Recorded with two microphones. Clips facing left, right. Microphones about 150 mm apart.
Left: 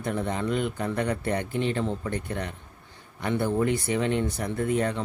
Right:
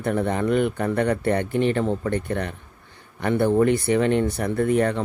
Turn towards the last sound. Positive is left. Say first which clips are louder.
# right 5 dB
turn(degrees=-60)  # may be behind; listen again after turning